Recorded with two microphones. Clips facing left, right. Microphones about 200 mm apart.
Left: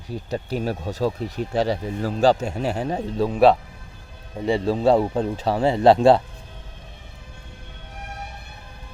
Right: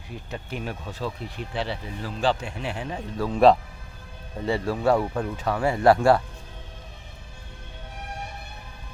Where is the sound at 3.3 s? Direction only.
5° left (ahead or behind).